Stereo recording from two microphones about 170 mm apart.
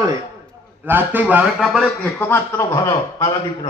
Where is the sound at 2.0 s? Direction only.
10° left (ahead or behind).